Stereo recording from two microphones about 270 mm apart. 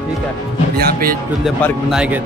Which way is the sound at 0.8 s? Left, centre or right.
Right.